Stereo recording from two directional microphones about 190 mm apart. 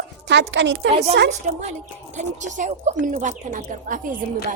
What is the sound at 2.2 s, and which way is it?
A woman's voice, 40° right (ahead or behind).